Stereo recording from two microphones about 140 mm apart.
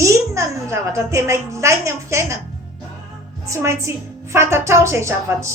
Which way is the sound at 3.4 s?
20° right (ahead or behind).